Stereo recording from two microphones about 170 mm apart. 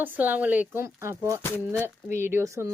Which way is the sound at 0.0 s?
10° right (ahead or behind).